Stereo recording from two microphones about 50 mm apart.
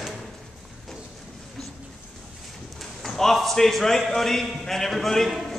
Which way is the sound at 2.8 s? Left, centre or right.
Centre.